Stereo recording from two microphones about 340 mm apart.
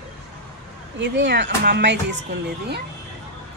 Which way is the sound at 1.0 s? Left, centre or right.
Right.